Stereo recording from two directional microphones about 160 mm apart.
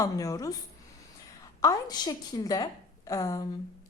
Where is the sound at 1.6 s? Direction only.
25° left (ahead or behind).